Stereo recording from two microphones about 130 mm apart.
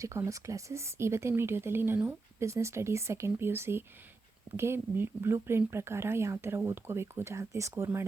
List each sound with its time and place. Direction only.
0.0 s speech: 20° right (ahead or behind)